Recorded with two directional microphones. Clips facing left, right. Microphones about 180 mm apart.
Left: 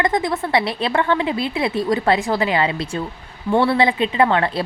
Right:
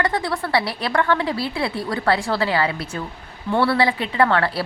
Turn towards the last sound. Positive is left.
turn(degrees=20)  # may be behind; listen again after turning